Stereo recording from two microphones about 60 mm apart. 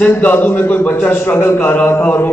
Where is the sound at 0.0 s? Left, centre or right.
Left.